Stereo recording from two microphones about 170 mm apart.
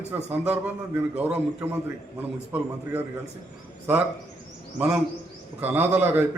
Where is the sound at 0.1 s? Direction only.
10° right (ahead or behind).